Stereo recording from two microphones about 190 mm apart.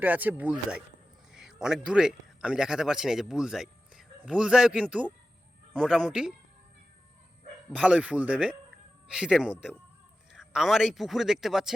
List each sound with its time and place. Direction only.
0.0 s speech: 10° right (ahead or behind)
7.7 s speech: 5° right (ahead or behind)